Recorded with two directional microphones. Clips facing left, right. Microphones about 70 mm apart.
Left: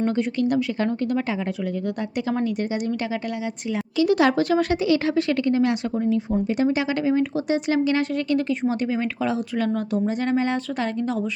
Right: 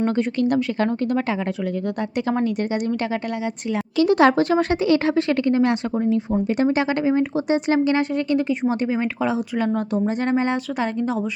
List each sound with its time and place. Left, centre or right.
0.0 s a woman's voice: right
4.1 s a woman's voice: right
10.8 s speech: centre